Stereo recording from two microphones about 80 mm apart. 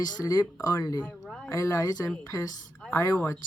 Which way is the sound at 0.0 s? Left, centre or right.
Left.